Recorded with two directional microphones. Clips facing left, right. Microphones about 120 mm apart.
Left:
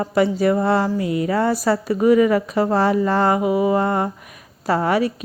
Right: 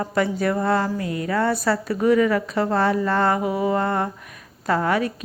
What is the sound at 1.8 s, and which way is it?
Speech, 10° left (ahead or behind).